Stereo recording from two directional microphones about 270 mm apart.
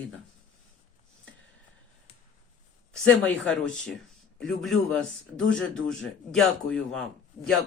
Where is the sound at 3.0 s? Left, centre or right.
Centre.